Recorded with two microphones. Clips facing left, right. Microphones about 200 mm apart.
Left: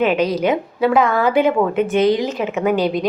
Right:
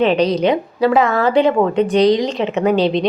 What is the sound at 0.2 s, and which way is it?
A woman's voice, 5° left (ahead or behind).